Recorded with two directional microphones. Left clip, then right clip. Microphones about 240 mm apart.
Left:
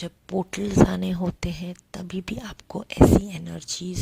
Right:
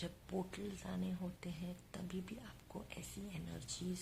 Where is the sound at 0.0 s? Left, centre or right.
Left.